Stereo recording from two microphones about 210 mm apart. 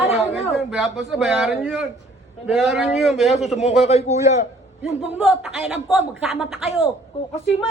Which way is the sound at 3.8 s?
30° left (ahead or behind).